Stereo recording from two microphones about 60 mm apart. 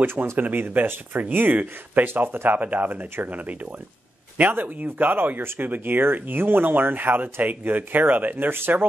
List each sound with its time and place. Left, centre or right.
0.0 s speech: right
2.0 s speech: right